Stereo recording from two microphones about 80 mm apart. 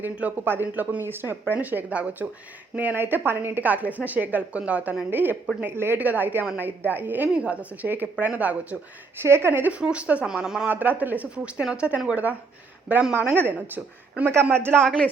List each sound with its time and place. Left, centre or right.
0.0 s a woman's voice: centre
9.2 s a woman's voice: right
9.7 s speech: centre
10.7 s a woman's voice: right
13.1 s a woman's voice: right
14.8 s speech: centre